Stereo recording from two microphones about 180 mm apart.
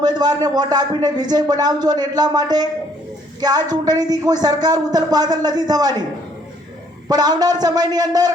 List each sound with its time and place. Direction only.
0.0 s a man's voice: 25° right (ahead or behind)
7.1 s a man's voice: 20° right (ahead or behind)